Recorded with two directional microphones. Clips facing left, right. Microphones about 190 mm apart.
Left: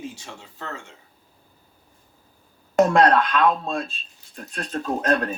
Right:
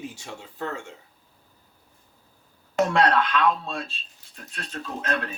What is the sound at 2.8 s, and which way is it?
Speech, 50° left (ahead or behind).